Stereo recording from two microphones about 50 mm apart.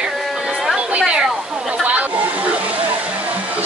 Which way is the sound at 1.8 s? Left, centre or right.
Right.